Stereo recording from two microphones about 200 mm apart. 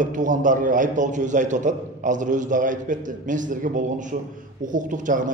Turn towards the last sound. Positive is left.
turn(degrees=-40)  # may be behind; listen again after turning